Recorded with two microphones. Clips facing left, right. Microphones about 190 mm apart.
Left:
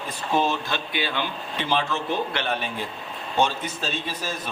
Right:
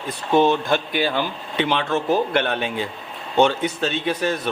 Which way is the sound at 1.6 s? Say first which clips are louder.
Right 3 dB; 65° right (ahead or behind).